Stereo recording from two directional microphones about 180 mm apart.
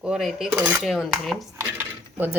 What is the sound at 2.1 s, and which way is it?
Speech, 10° right (ahead or behind).